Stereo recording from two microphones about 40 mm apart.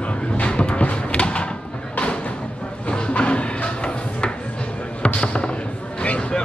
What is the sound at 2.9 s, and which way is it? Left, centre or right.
Music, left.